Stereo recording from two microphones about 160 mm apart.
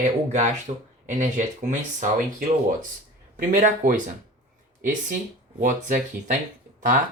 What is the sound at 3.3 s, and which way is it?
Speech, 60° right (ahead or behind).